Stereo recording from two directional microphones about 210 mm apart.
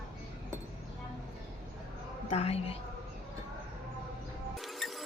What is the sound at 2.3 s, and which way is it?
Speech, 30° left (ahead or behind).